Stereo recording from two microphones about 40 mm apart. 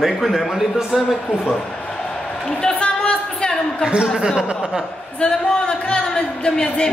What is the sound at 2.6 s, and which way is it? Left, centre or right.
Music, left.